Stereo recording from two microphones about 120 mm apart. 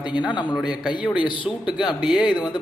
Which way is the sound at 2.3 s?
40° left (ahead or behind).